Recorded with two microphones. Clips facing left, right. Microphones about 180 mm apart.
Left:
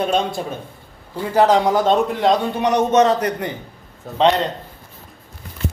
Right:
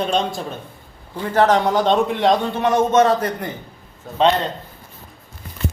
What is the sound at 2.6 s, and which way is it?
Speech, 20° left (ahead or behind).